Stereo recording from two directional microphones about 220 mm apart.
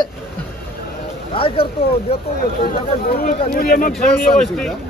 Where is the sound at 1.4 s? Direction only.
25° left (ahead or behind).